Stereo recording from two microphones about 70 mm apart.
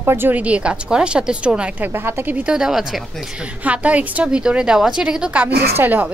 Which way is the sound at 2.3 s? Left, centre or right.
Centre.